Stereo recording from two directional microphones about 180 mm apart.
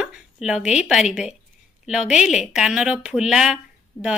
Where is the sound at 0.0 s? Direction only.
5° right (ahead or behind).